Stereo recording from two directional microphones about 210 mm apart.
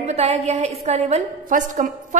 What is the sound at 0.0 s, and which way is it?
A woman's voice, 30° right (ahead or behind).